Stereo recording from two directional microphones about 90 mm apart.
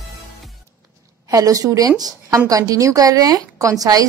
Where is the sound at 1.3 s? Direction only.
40° right (ahead or behind).